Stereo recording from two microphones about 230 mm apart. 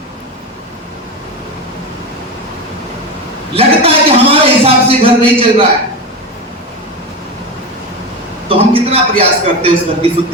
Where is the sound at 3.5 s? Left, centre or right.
Right.